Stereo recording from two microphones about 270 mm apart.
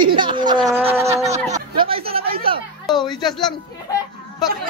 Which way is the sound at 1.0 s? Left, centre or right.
Right.